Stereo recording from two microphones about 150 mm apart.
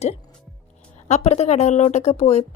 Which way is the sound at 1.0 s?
50° left (ahead or behind).